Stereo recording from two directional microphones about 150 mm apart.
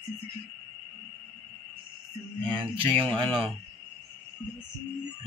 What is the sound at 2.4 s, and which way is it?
Speech, 35° right (ahead or behind).